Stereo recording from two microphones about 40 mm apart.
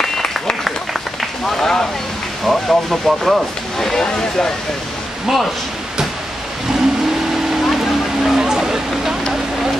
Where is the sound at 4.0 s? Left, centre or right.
Centre.